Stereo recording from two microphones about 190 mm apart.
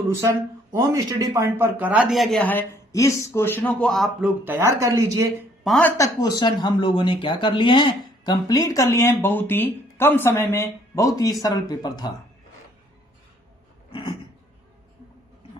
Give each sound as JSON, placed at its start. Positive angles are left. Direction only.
{"t": 0.2, "sound": "speech", "side_deg": -15}
{"t": 4.4, "sound": "speech", "side_deg": -15}
{"t": 5.6, "sound": "speech", "side_deg": 5}
{"t": 6.0, "sound": "speech", "side_deg": 20}
{"t": 13.9, "sound": "a sound", "side_deg": 25}